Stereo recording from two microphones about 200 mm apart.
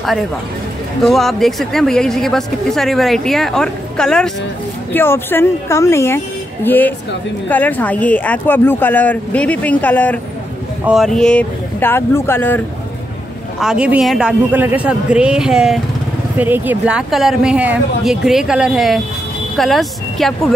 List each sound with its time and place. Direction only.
1.0 s speech: centre (ahead or behind)
13.6 s speech: 5° right (ahead or behind)